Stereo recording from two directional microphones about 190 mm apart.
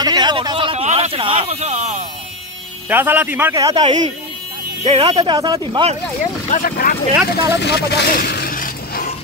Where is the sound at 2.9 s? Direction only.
10° right (ahead or behind); by 5.9 s 25° right (ahead or behind).